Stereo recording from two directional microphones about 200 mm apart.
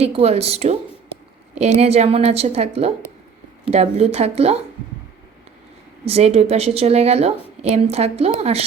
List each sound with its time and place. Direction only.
0.0 s a woman's voice: 30° right (ahead or behind)
6.1 s a woman's voice: 30° right (ahead or behind)